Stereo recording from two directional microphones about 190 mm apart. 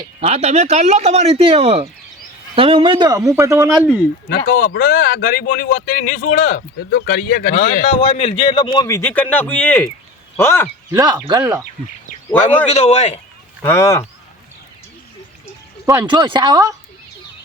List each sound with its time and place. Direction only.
0.2 s a man's voice: 35° right (ahead or behind); by 4.0 s 5° right (ahead or behind)
4.3 s speech: 55° left (ahead or behind); by 6.6 s 40° left (ahead or behind)
6.9 s speech: 55° left (ahead or behind)
7.9 s a man's voice: 30° left (ahead or behind)
9.0 s speech: 10° left (ahead or behind)
10.9 s a man's voice: 20° right (ahead or behind)
12.6 s a man's voice: 35° left (ahead or behind)
13.6 s speech: 15° left (ahead or behind)
15.9 s a man's voice: 25° right (ahead or behind)